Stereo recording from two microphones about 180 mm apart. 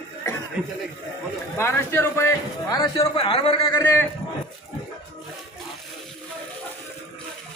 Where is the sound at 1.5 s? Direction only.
15° left (ahead or behind).